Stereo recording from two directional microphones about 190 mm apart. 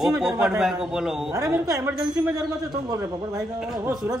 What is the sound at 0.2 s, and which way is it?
Speech, centre (ahead or behind).